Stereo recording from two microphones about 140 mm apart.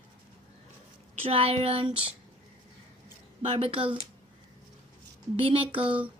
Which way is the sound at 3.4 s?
45° right (ahead or behind).